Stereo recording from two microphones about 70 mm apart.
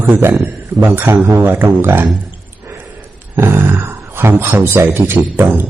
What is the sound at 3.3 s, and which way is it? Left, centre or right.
A man's voice, right.